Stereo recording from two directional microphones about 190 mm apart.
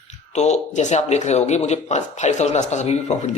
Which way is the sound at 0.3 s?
35° left (ahead or behind).